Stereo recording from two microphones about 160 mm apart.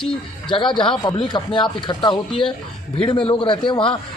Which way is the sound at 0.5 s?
30° left (ahead or behind).